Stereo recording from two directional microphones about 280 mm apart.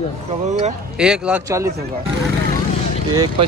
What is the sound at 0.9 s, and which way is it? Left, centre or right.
Speech, centre.